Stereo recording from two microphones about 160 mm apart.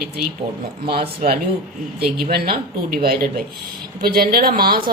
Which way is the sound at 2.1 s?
70° right (ahead or behind).